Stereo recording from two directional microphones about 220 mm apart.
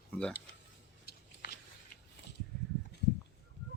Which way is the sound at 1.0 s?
45° left (ahead or behind).